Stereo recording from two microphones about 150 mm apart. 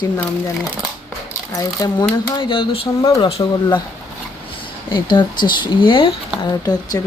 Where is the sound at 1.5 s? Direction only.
25° left (ahead or behind).